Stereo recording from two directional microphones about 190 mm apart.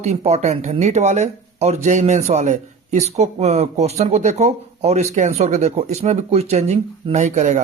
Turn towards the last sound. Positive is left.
turn(degrees=-40)  # may be behind; listen again after turning